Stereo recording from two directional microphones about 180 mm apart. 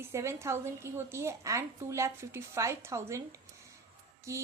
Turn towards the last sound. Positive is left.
turn(degrees=-15)  # may be behind; listen again after turning